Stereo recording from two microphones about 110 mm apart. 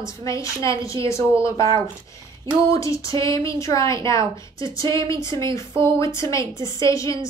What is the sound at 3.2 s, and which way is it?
A woman's voice, 30° left (ahead or behind).